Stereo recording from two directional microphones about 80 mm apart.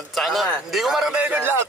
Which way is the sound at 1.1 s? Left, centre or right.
Centre.